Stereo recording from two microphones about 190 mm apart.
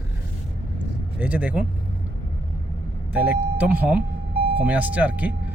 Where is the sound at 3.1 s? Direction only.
5° right (ahead or behind).